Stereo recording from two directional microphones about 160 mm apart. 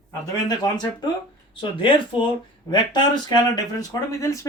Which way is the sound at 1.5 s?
30° left (ahead or behind).